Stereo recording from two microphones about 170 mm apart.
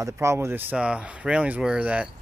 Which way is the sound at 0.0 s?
15° right (ahead or behind).